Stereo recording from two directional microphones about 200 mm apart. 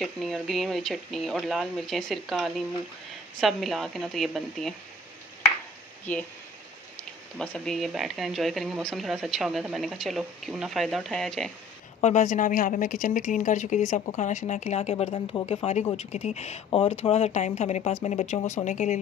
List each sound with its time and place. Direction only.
0.0 s speech: centre (ahead or behind)
6.1 s speech: 10° left (ahead or behind)
12.0 s speech: 35° left (ahead or behind)